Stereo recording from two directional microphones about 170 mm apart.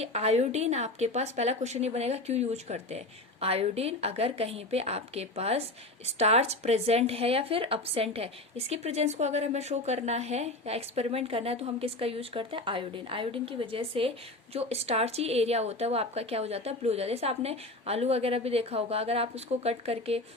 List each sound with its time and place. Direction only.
0.0 s speech: 40° right (ahead or behind)